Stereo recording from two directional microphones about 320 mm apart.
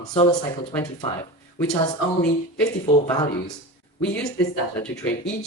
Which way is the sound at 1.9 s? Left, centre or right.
Left.